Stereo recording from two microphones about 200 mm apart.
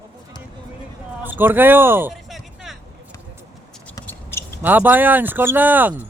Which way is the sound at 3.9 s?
10° left (ahead or behind).